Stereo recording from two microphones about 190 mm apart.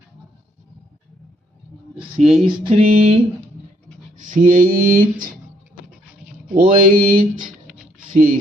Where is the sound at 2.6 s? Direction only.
30° right (ahead or behind).